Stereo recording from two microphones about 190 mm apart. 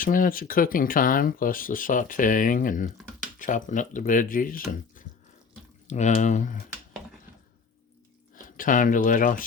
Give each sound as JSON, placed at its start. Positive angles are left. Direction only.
{"t": 0.0, "sound": "speech", "side_deg": 45}
{"t": 8.4, "sound": "speech", "side_deg": 45}